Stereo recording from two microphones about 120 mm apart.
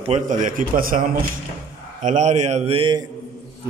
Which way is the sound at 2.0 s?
80° right.